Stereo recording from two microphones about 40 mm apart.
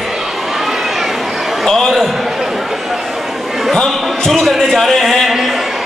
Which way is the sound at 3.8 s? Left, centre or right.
Centre.